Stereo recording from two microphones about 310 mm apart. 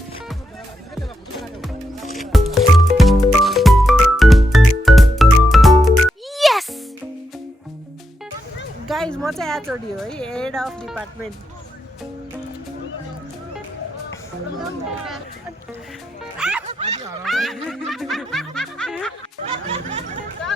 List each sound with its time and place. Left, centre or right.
2.1 s music: centre
8.9 s speech: centre
16.4 s music: centre
16.6 s a sound: right
17.1 s snicker: centre
19.6 s snicker: centre